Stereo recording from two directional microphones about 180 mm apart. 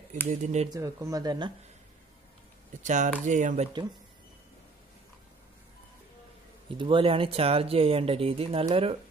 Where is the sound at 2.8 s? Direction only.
40° right (ahead or behind).